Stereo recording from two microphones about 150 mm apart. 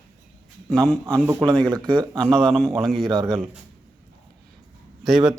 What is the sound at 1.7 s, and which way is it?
Speech, 30° right (ahead or behind).